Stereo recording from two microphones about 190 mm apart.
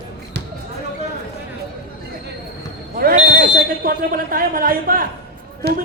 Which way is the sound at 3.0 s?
55° right (ahead or behind).